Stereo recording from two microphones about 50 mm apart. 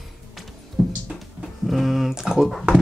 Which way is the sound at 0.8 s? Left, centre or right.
Centre.